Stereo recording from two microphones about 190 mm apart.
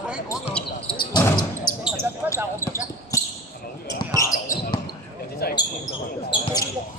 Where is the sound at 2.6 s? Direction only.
15° left (ahead or behind).